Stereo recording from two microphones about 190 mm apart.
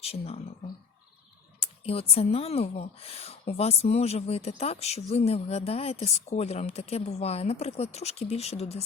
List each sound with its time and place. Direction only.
0.0 s speech: 30° left (ahead or behind)
1.5 s speech: 30° left (ahead or behind)